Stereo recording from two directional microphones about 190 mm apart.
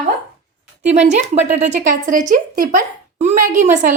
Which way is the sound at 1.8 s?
45° right (ahead or behind).